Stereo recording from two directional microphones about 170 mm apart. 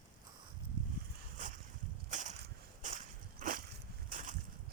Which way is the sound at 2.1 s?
45° right (ahead or behind).